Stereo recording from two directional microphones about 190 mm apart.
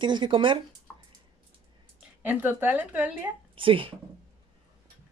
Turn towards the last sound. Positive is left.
turn(degrees=-25)  # may be behind; listen again after turning